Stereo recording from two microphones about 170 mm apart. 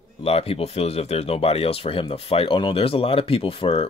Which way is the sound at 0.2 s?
35° left (ahead or behind).